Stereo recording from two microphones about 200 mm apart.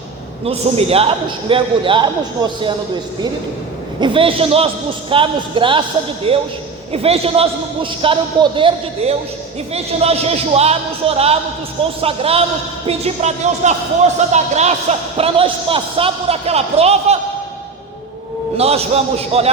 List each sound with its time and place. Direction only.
0.4 s a man's voice: 30° right (ahead or behind)
4.0 s a man's voice: 25° right (ahead or behind)
18.5 s speech: 30° right (ahead or behind)